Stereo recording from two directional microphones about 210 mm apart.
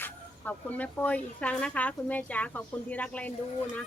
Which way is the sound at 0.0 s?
5° left (ahead or behind).